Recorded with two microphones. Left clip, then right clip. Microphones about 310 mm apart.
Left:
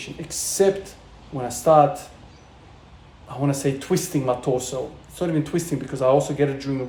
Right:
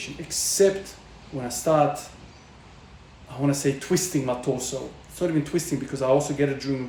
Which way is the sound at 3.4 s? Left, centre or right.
Centre.